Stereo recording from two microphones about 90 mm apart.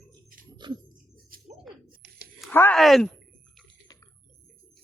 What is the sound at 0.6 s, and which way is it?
Music, 55° right (ahead or behind).